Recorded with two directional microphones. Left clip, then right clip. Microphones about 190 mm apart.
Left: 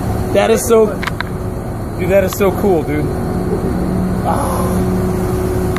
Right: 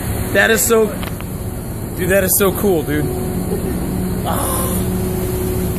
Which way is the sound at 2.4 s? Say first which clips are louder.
Left 2 dB; 40° right (ahead or behind).